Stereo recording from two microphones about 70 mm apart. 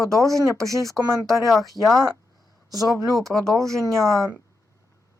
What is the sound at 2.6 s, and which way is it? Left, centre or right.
Speech, right.